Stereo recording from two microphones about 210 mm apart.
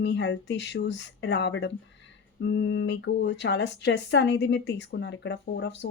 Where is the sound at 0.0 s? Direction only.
55° left (ahead or behind).